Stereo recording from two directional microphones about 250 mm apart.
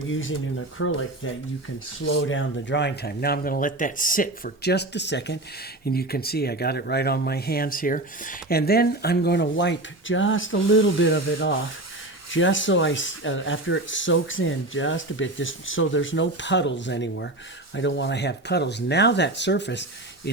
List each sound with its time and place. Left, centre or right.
0.0 s speech: left
12.3 s speech: left